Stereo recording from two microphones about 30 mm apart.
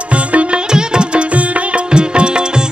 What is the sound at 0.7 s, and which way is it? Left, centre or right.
Music, right.